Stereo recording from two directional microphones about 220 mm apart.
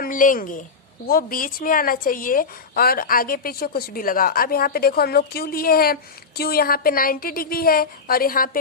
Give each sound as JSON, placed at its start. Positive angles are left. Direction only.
{"t": 0.0, "sound": "a woman's voice", "side_deg": 35}